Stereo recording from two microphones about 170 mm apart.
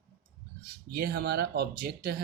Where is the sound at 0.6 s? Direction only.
60° right (ahead or behind).